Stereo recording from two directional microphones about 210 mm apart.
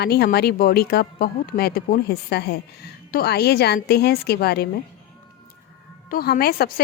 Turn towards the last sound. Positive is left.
turn(degrees=45)  # may be behind; listen again after turning